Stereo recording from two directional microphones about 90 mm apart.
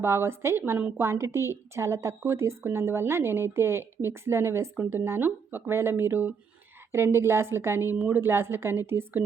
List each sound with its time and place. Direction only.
0.0 s a woman's voice: 30° right (ahead or behind)